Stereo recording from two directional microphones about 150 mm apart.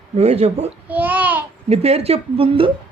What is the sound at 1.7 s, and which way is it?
Speech, 45° right (ahead or behind).